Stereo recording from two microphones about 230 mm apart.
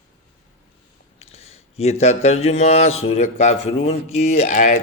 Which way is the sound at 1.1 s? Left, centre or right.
Left.